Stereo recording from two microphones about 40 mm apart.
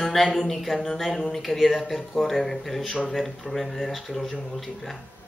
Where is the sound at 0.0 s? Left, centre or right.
Centre.